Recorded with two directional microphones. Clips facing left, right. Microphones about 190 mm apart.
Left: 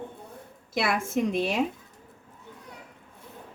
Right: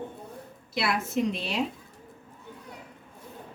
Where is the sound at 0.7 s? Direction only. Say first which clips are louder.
Left 1 dB; 50° left (ahead or behind).